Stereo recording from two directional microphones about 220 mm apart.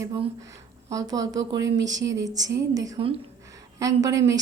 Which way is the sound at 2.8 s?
20° right (ahead or behind).